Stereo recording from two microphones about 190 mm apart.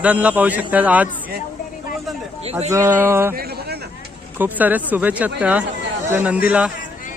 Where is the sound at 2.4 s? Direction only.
35° right (ahead or behind).